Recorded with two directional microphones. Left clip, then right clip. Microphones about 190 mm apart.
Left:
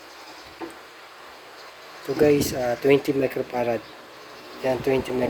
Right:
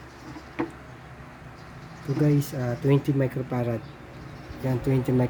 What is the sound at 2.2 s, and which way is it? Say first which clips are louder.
Speech: left 8 dB; 20° left (ahead or behind).